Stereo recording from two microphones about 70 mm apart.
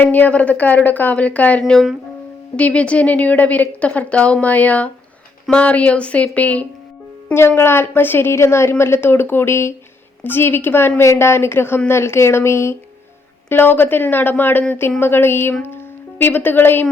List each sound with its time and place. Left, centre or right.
0.0 s a woman's voice: left
7.3 s a woman's voice: left